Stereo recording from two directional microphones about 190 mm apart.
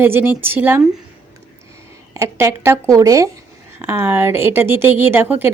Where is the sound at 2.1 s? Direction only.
15° right (ahead or behind).